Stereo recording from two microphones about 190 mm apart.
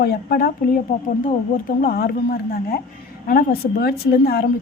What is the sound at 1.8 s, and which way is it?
A woman's voice, 50° left (ahead or behind).